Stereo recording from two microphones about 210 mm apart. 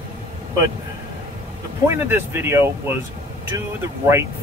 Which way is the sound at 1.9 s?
10° right (ahead or behind).